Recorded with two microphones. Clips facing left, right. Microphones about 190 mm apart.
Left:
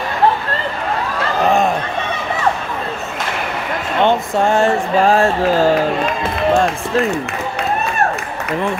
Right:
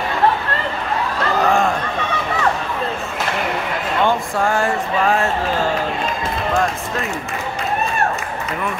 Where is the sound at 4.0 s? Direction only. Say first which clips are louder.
Left 4 dB; 20° left (ahead or behind).